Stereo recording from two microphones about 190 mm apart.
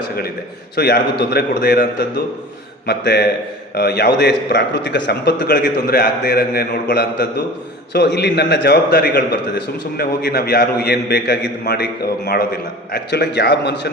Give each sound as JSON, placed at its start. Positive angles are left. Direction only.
{"t": 0.8, "sound": "a man's voice", "side_deg": 60}